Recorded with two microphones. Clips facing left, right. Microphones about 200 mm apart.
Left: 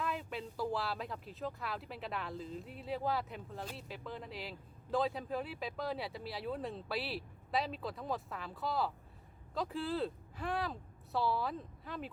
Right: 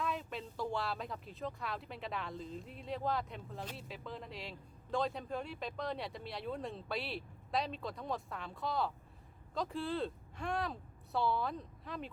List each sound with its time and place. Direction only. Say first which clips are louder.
0.0 s speech: even; centre (ahead or behind)